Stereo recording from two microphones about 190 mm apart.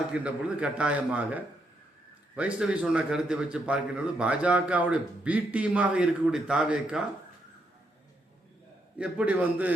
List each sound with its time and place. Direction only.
0.1 s a man's voice: 5° right (ahead or behind)
9.0 s a man's voice: 5° right (ahead or behind)